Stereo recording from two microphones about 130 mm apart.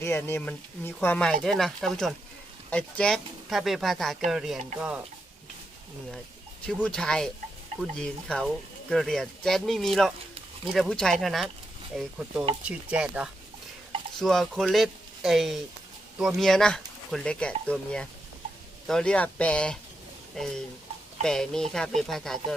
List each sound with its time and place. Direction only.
0.0 s speech: 20° left (ahead or behind); by 5.0 s 10° right (ahead or behind)
6.8 s speech: 5° left (ahead or behind)
14.2 s speech: centre (ahead or behind)